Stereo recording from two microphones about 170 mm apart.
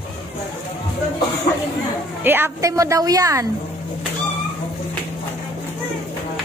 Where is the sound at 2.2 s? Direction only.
15° right (ahead or behind).